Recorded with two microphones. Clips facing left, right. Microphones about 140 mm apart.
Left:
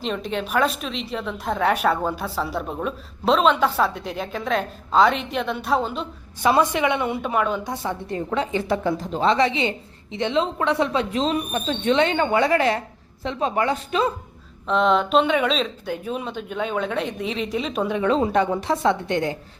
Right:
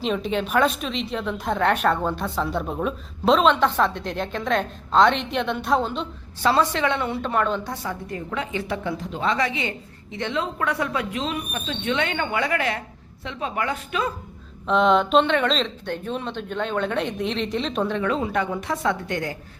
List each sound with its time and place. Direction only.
0.0 s a woman's voice: centre (ahead or behind)
6.4 s a woman's voice: 15° left (ahead or behind)
7.7 s a woman's voice: 25° left (ahead or behind)
14.7 s a woman's voice: centre (ahead or behind)
18.0 s a woman's voice: 30° left (ahead or behind)